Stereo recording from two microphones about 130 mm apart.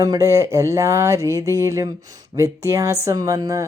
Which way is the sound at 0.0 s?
25° right (ahead or behind).